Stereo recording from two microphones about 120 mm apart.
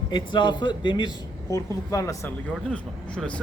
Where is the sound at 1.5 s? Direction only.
25° left (ahead or behind).